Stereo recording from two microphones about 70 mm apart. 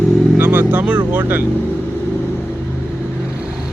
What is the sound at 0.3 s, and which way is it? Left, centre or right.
Speech, right.